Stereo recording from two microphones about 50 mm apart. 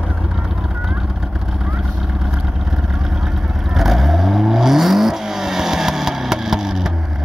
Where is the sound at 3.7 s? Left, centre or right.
Centre.